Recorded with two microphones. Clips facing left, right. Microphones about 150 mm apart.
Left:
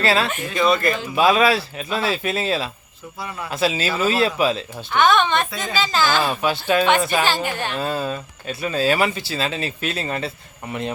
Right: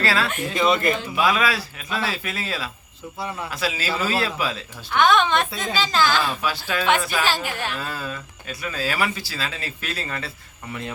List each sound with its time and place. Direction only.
0.0 s speech: 25° left (ahead or behind)
0.4 s speech: 25° right (ahead or behind)
1.1 s speech: 25° left (ahead or behind)
4.9 s speech: centre (ahead or behind)
6.2 s speech: 25° left (ahead or behind)
7.4 s speech: centre (ahead or behind)
7.8 s speech: 25° left (ahead or behind)